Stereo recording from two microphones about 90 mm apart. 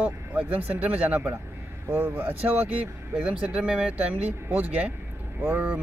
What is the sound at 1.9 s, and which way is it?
Speech, 25° right (ahead or behind).